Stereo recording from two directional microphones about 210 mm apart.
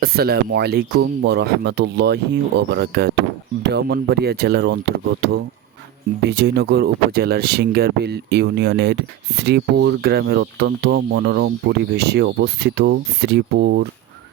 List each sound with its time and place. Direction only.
0.0 s speech: 45° right (ahead or behind)